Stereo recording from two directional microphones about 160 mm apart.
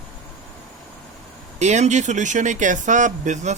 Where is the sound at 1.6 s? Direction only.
45° right (ahead or behind).